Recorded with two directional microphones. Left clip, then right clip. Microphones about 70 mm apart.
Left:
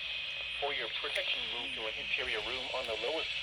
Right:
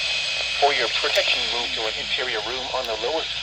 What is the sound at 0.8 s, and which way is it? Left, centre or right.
Speech, right.